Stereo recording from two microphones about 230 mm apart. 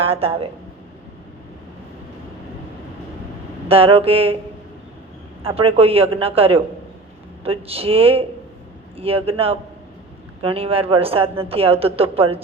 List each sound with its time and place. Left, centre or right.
0.0 s a woman's voice: right
3.7 s a woman's voice: right
5.4 s a woman's voice: right